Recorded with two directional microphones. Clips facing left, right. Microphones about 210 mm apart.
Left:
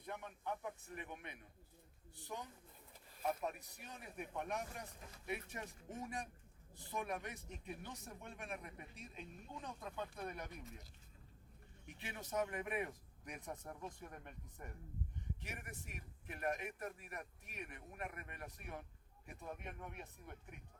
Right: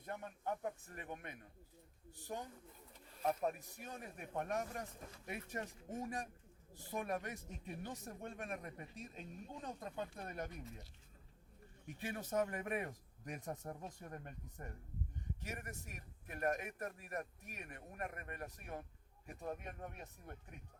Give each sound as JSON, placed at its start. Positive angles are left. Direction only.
{"t": 0.0, "sound": "a man's voice", "side_deg": -45}
{"t": 11.9, "sound": "a man's voice", "side_deg": -45}
{"t": 15.4, "sound": "a man's voice", "side_deg": -45}